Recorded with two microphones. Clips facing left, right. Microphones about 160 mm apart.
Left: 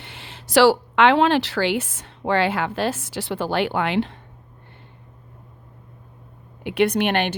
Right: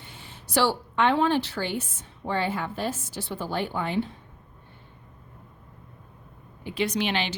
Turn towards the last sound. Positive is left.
turn(degrees=55)  # may be behind; listen again after turning